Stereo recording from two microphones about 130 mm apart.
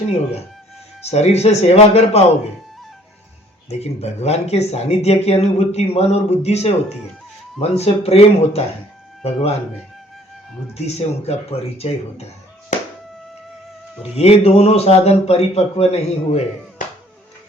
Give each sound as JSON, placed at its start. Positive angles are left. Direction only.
{"t": 1.0, "sound": "speech", "side_deg": 55}
{"t": 3.7, "sound": "a man's voice", "side_deg": 55}
{"t": 10.8, "sound": "a man's voice", "side_deg": 55}
{"t": 14.2, "sound": "a man's voice", "side_deg": 50}